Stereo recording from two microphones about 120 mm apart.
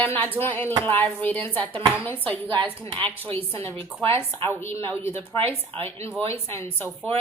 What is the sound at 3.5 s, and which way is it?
A woman's voice, 25° left (ahead or behind).